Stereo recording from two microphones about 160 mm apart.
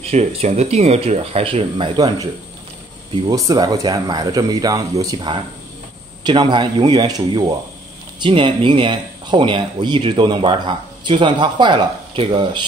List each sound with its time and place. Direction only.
0.0 s speech: 40° right (ahead or behind)
3.3 s speech: 25° right (ahead or behind)